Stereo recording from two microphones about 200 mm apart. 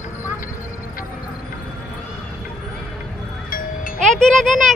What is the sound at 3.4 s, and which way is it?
Music, 45° left (ahead or behind).